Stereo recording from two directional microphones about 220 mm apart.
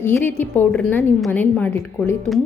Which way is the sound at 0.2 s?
10° left (ahead or behind).